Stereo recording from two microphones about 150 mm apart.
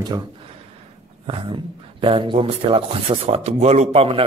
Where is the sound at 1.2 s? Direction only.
35° right (ahead or behind).